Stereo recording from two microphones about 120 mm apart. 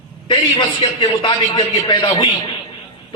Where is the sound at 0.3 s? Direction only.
45° left (ahead or behind).